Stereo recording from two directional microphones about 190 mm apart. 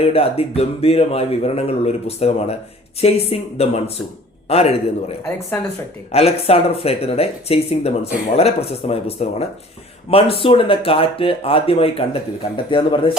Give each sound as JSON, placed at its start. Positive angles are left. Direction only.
{"t": 0.0, "sound": "speech", "side_deg": 30}